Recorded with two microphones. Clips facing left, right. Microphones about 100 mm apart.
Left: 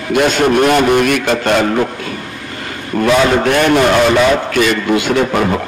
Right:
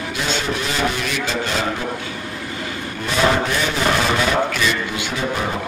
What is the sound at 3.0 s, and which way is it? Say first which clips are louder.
Speech: left 7 dB; 65° left (ahead or behind).